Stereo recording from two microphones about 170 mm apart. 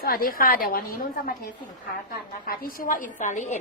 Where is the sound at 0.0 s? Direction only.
60° left (ahead or behind).